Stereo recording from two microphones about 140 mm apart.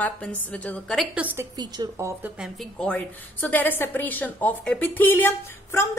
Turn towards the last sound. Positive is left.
turn(degrees=15)  # may be behind; listen again after turning